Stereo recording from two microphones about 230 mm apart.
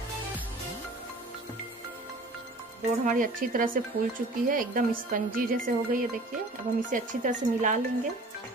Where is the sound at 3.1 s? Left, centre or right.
Right.